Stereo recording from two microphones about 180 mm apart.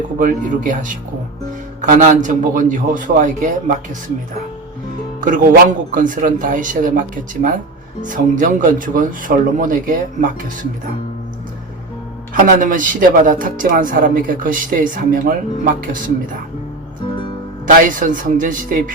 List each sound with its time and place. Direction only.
0.2 s speech: 45° right (ahead or behind)
5.2 s speech: 50° right (ahead or behind)
8.0 s speech: 45° right (ahead or behind)
12.3 s speech: 50° right (ahead or behind)
17.8 s speech: 50° right (ahead or behind)